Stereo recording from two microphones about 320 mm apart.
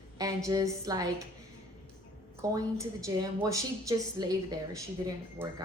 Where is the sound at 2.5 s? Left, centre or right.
Centre.